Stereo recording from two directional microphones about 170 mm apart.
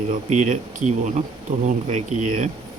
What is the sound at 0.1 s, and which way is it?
Speech, 45° right (ahead or behind).